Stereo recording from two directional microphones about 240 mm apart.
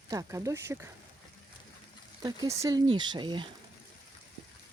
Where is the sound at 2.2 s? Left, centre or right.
Centre.